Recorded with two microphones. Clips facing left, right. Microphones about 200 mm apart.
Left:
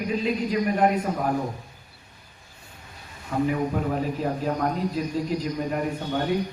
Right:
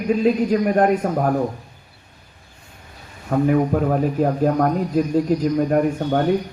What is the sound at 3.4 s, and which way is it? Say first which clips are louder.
A man's voice: right 8 dB; 50° right (ahead or behind).